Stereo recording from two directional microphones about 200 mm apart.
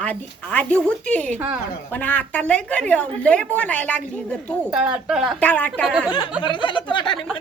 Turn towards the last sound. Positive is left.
turn(degrees=25)  # may be behind; listen again after turning